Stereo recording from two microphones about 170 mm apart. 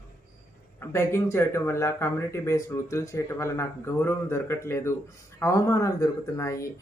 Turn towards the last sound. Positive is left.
turn(degrees=20)  # may be behind; listen again after turning